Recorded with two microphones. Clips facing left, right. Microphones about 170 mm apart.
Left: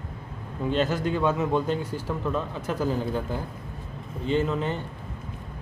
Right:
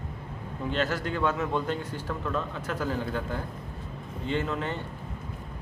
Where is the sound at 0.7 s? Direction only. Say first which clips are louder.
Left 4 dB; 15° left (ahead or behind).